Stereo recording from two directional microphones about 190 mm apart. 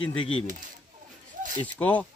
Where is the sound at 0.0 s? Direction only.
90° left.